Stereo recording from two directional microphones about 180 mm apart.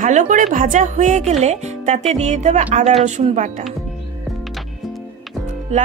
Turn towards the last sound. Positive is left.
turn(degrees=-40)  # may be behind; listen again after turning